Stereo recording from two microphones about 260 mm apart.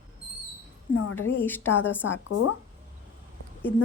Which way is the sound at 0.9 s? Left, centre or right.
Left.